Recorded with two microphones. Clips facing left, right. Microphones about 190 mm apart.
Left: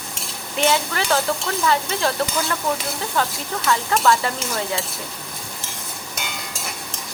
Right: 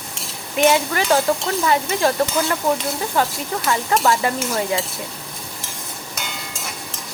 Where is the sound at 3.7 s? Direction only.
20° right (ahead or behind).